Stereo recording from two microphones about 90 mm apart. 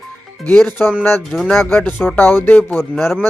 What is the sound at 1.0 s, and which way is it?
Speech, 25° left (ahead or behind).